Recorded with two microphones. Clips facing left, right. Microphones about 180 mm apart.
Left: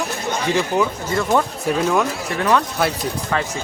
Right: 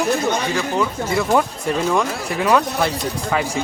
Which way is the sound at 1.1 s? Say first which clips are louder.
Right 3 dB; 10° right (ahead or behind).